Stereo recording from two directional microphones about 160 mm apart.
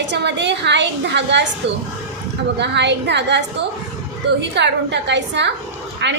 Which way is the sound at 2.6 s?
90° right.